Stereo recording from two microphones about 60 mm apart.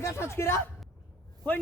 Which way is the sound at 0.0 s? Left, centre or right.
Left.